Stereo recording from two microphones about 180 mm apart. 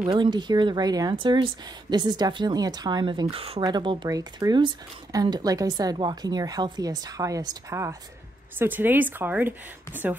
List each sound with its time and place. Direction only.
0.0 s a woman's voice: 25° right (ahead or behind); by 10.1 s 10° right (ahead or behind)